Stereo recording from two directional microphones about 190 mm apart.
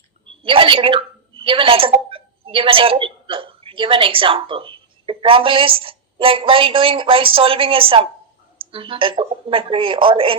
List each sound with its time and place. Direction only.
0.3 s a woman's voice: 25° right (ahead or behind)